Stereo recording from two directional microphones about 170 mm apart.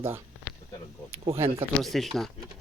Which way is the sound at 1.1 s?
35° right (ahead or behind).